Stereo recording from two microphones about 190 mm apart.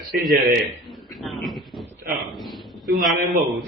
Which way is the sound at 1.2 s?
Centre (ahead or behind).